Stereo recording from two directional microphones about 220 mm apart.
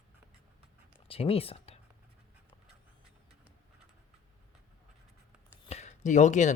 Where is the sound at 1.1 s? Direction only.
25° left (ahead or behind).